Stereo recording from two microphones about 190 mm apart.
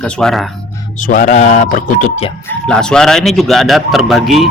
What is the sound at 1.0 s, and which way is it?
Speech, 45° left (ahead or behind).